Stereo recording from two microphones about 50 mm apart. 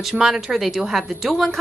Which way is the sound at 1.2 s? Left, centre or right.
Centre.